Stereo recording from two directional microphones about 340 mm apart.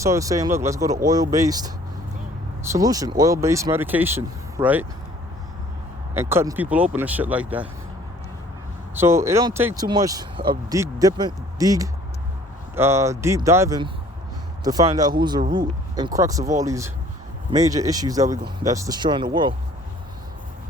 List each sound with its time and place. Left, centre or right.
0.0 s speech: centre
6.1 s speech: centre
9.0 s speech: centre